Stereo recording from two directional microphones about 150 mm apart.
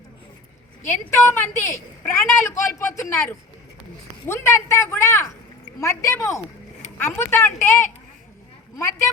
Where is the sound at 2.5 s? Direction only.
20° left (ahead or behind).